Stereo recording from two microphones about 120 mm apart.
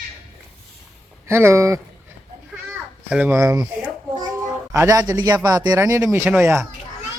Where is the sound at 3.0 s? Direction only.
15° right (ahead or behind).